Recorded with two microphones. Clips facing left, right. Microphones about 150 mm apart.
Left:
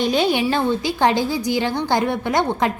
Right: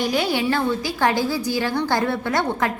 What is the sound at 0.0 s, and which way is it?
A woman's voice, 25° left (ahead or behind).